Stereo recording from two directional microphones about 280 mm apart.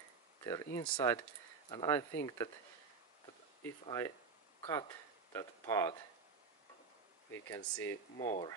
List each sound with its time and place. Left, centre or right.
0.4 s a sound: centre
0.7 s speech: centre
3.8 s speech: centre
7.3 s speech: centre
8.2 s speech: left